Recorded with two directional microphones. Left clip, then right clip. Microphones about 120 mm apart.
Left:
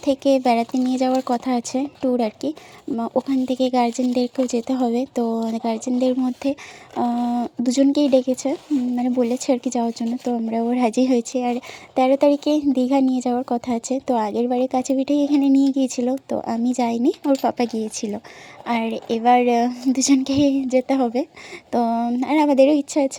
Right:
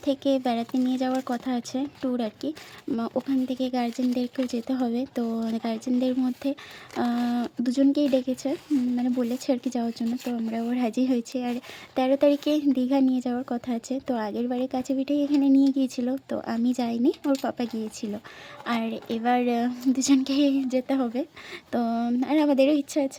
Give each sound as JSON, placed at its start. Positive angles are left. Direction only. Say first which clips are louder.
{"t": 0.0, "sound": "a woman's voice", "louder": "left 7 dB", "side_deg": 25}
{"t": 7.0, "sound": "a woman's voice", "louder": "left 5 dB", "side_deg": 20}
{"t": 10.2, "sound": "a woman's voice", "louder": "left 11 dB", "side_deg": 35}
{"t": 15.5, "sound": "a woman's voice", "louder": "left 4 dB", "side_deg": 25}